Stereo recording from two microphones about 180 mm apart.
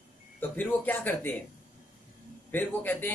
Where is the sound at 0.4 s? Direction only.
10° left (ahead or behind).